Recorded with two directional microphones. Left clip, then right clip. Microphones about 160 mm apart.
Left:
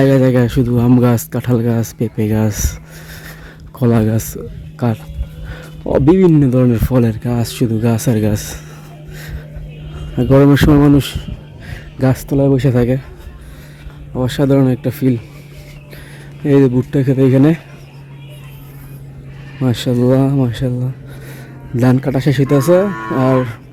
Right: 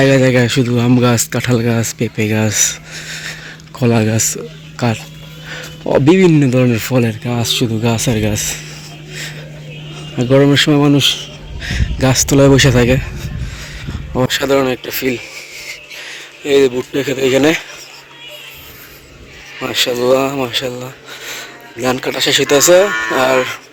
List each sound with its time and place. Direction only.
0.0 s speech: 30° left (ahead or behind)
5.5 s music: 20° left (ahead or behind)
6.3 s speech: 25° left (ahead or behind)
10.2 s speech: 30° left (ahead or behind)
10.5 s speech: 45° left (ahead or behind)
11.6 s a sound: 20° left (ahead or behind)
12.3 s speech: 5° left (ahead or behind)
12.6 s speech: 15° left (ahead or behind)
14.2 s speech: 5° left (ahead or behind)
19.7 s speech: 15° left (ahead or behind)
20.8 s a sound: 15° left (ahead or behind)
21.8 s speech: 20° left (ahead or behind)